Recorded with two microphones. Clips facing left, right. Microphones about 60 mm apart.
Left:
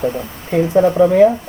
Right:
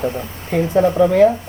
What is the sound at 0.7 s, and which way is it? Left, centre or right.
Speech, left.